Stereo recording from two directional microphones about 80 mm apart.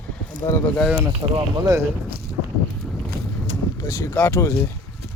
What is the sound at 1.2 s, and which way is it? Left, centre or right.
Speech, right.